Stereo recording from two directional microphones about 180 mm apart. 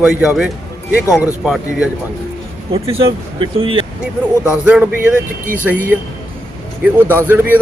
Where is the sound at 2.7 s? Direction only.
30° right (ahead or behind).